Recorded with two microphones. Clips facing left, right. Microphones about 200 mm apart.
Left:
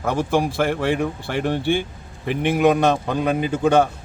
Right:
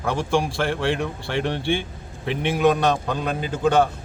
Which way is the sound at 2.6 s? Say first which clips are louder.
Left 2 dB; 10° left (ahead or behind).